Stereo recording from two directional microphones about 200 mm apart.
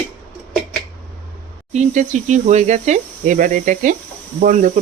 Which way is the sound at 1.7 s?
35° right (ahead or behind).